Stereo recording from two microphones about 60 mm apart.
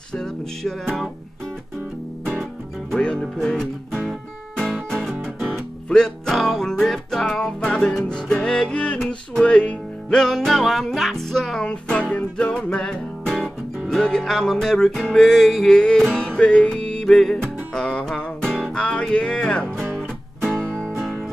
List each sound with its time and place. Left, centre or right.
0.1 s music: centre
0.8 s music: centre
2.9 s music: centre
3.9 s music: centre
5.9 s music: centre
11.6 s music: centre
20.0 s music: centre
20.6 s music: centre